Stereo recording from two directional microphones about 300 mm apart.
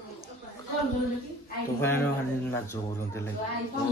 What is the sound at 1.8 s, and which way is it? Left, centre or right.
Speech, centre.